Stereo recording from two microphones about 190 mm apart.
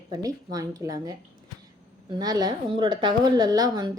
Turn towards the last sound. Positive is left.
turn(degrees=-20)  # may be behind; listen again after turning